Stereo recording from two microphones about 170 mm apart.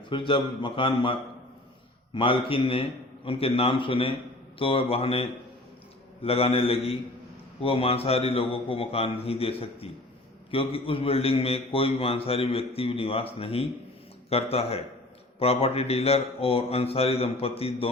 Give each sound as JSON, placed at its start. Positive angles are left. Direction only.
{"t": 0.1, "sound": "a man's voice", "side_deg": 30}